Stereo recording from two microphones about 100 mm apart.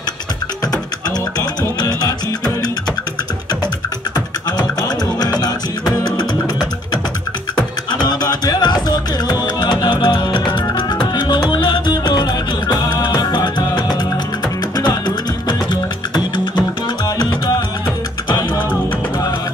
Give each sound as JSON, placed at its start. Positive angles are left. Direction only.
{"t": 1.4, "sound": "music", "side_deg": 40}
{"t": 4.5, "sound": "music", "side_deg": 45}
{"t": 7.5, "sound": "music", "side_deg": 45}